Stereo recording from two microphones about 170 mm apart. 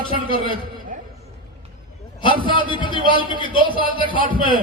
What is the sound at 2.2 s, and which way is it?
A man's voice, 30° left (ahead or behind).